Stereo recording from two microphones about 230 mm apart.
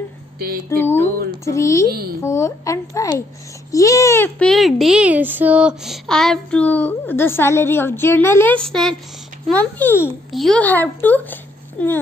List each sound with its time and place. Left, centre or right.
0.7 s a woman's voice: centre
1.9 s a child's voice: right
2.2 s a child's voice: centre